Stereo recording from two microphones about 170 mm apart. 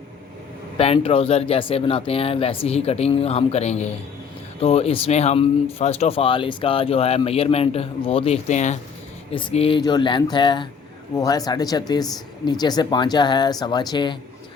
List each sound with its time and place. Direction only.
0.8 s speech: 35° left (ahead or behind)